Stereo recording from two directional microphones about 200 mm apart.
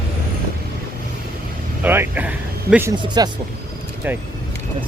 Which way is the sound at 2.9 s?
25° right (ahead or behind).